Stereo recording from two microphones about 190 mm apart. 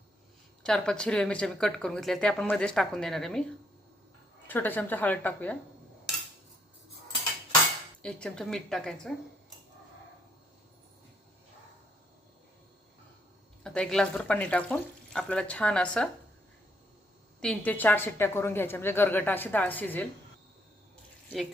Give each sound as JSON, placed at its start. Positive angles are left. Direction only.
{"t": 0.6, "sound": "speech", "side_deg": 5}
{"t": 4.4, "sound": "a woman's voice", "side_deg": 10}
{"t": 8.0, "sound": "speech", "side_deg": 5}
{"t": 13.7, "sound": "speech", "side_deg": 5}
{"t": 17.4, "sound": "a woman's voice", "side_deg": 5}